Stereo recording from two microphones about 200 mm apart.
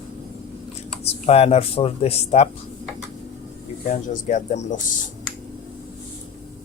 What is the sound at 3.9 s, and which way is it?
Speech, 40° left (ahead or behind).